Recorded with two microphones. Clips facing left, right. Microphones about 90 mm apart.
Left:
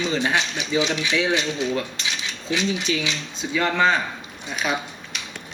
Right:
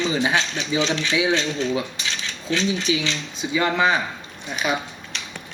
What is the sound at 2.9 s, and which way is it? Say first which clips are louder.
Speech: right 2 dB; 5° right (ahead or behind).